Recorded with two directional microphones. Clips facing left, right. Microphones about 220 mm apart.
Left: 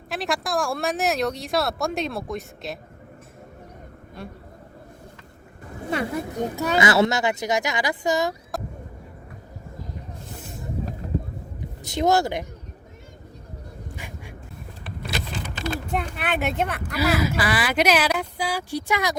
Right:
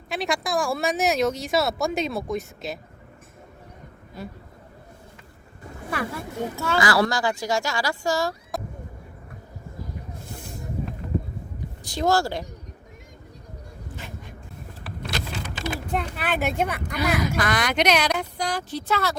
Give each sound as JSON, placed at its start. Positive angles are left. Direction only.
{"t": 0.1, "sound": "speech", "side_deg": 0}
{"t": 4.2, "sound": "speech", "side_deg": 0}
{"t": 5.9, "sound": "speech", "side_deg": 20}
{"t": 11.8, "sound": "speech", "side_deg": 20}
{"t": 13.8, "sound": "duck", "side_deg": 15}
{"t": 15.9, "sound": "speech", "side_deg": 0}